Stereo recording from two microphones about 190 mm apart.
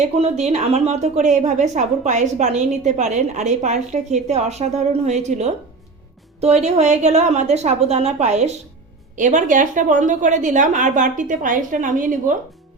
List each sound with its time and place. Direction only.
0.0 s a woman's voice: 35° right (ahead or behind)